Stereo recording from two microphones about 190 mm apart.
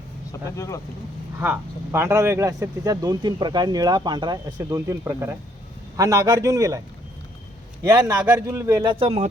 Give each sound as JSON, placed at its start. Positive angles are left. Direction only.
{"t": 0.3, "sound": "speech", "side_deg": 15}
{"t": 1.4, "sound": "speech", "side_deg": -10}
{"t": 7.9, "sound": "speech", "side_deg": -15}